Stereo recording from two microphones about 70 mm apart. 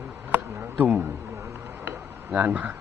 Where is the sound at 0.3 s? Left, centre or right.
Right.